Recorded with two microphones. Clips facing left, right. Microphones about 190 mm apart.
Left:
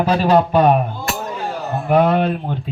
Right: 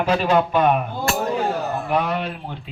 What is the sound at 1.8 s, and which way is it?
Speech, 55° left (ahead or behind).